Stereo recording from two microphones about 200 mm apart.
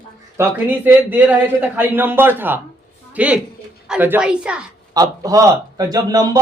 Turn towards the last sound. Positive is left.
turn(degrees=-20)  # may be behind; listen again after turning